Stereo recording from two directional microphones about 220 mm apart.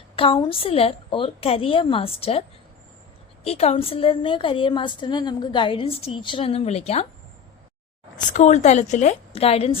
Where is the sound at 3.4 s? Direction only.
25° left (ahead or behind).